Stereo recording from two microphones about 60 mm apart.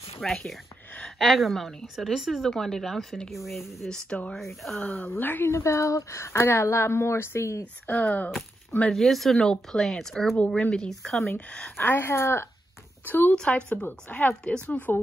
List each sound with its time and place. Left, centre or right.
0.2 s speech: centre
0.9 s a sound: centre
1.4 s speech: centre
5.1 s speech: left
5.5 s speech: left
7.8 s speech: left
8.9 s speech: centre
10.3 s speech: centre
10.9 s speech: centre
11.3 s speech: centre
11.7 s speech: left
13.0 s speech: left
13.3 s speech: centre
13.8 s speech: left